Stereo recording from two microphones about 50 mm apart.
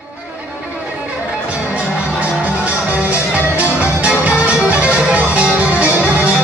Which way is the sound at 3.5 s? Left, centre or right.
Right.